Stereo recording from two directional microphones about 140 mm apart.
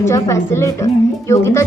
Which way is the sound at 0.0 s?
20° left (ahead or behind).